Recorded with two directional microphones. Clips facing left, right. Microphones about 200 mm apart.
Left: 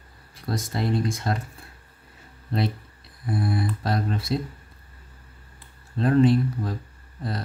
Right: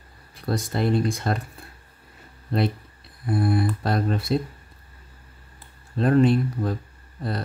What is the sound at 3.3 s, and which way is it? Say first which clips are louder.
Speech: right 4 dB; 55° right (ahead or behind).